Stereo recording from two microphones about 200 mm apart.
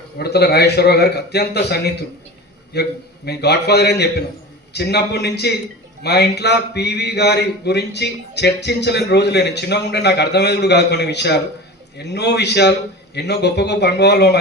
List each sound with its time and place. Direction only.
0.2 s a man's voice: 55° left (ahead or behind)